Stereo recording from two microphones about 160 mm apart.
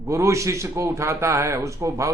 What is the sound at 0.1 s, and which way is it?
Speech, 20° right (ahead or behind).